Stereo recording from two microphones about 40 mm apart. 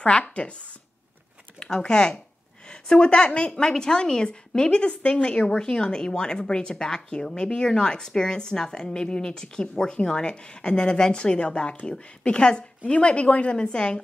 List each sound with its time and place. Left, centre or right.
0.0 s a woman's voice: left
1.8 s a woman's voice: left